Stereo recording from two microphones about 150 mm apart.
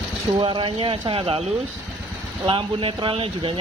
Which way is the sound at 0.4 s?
35° right (ahead or behind).